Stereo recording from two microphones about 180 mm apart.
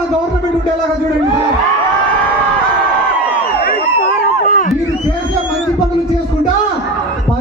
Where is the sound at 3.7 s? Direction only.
55° left (ahead or behind).